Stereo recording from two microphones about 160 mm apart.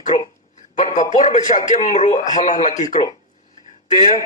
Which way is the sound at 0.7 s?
50° left (ahead or behind).